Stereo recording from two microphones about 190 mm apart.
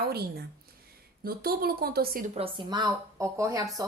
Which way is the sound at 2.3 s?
30° right (ahead or behind).